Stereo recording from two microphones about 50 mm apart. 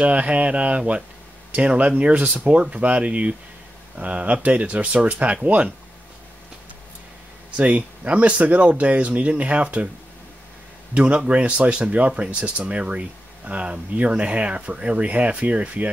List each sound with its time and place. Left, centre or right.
0.0 s speech: right
7.5 s speech: right
11.0 s speech: right